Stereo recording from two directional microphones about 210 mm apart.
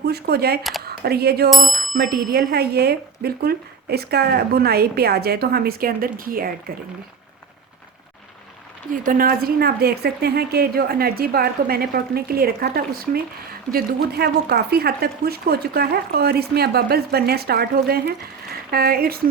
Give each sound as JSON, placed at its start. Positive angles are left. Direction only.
{"t": 0.0, "sound": "speech", "side_deg": -50}
{"t": 1.6, "sound": "bicycle bell", "side_deg": 0}
{"t": 2.0, "sound": "speech", "side_deg": -45}
{"t": 9.0, "sound": "speech", "side_deg": -45}